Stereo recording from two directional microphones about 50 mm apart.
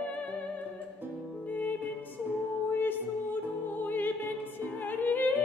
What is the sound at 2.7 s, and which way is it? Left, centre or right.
Music, left.